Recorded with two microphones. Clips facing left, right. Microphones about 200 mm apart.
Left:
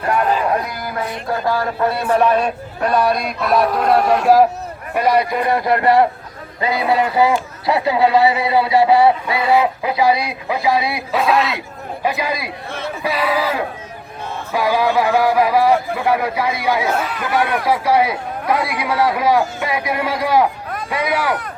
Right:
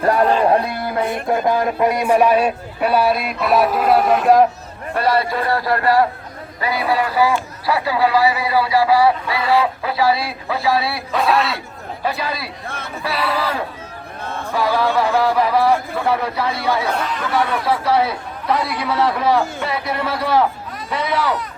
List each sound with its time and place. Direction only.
0.0 s a sound: 35° right (ahead or behind)
1.3 s a man's voice: 20° right (ahead or behind); by 4.4 s centre (ahead or behind)
4.9 s a man's voice: 15° left (ahead or behind)
11.1 s a man's voice: centre (ahead or behind)
12.0 s speech: 15° left (ahead or behind)